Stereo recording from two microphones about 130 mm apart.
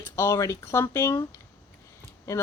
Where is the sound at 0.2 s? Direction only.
20° left (ahead or behind).